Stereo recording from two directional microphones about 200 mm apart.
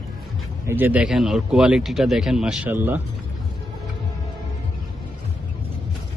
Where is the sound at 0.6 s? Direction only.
10° right (ahead or behind).